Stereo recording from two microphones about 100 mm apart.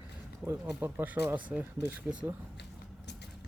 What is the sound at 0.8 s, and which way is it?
Speech, 20° right (ahead or behind).